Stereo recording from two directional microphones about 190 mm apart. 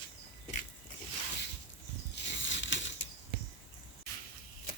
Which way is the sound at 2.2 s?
75° left (ahead or behind).